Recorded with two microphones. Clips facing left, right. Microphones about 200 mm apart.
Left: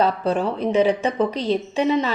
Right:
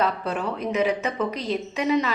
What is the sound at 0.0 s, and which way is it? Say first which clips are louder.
A woman's voice: left 5 dB; 30° left (ahead or behind).